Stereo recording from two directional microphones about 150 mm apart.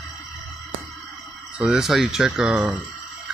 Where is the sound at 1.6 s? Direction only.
Centre (ahead or behind).